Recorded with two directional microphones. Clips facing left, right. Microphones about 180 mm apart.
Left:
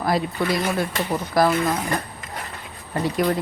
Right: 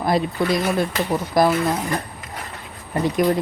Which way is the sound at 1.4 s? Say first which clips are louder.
Right 2 dB; 20° right (ahead or behind).